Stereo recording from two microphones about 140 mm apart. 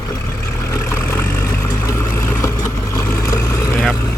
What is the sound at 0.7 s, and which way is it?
Vehicle, 15° left (ahead or behind).